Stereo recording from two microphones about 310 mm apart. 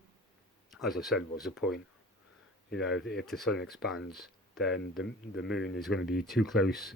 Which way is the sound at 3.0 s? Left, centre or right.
Left.